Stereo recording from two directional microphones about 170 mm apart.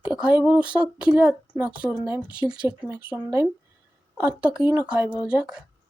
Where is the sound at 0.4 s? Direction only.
5° right (ahead or behind).